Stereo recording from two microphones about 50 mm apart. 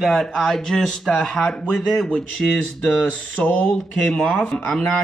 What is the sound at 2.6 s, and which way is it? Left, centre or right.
Speech, left.